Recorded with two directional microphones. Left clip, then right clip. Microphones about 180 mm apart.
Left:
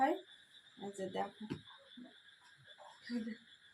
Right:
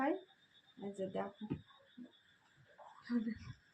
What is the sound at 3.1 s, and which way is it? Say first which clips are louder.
Frog: right 3 dB; 15° left (ahead or behind).